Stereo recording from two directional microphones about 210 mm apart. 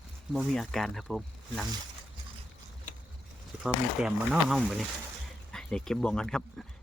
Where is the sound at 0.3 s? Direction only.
Centre (ahead or behind).